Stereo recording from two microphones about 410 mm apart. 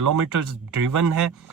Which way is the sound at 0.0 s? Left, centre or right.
Right.